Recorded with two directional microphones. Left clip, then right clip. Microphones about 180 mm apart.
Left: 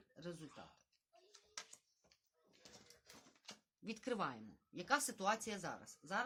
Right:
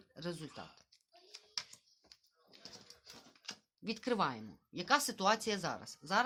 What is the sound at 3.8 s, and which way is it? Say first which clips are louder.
A woman's voice: right 8 dB; 15° right (ahead or behind).